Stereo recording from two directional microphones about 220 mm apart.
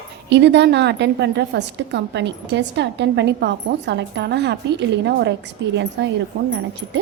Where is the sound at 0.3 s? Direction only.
50° right (ahead or behind).